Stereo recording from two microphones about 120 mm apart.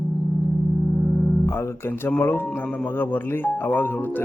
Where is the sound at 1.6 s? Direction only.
15° left (ahead or behind).